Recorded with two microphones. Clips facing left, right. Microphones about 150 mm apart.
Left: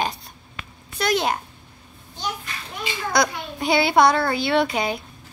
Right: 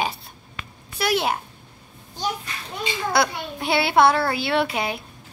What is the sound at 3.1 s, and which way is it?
A child's voice, 5° right (ahead or behind).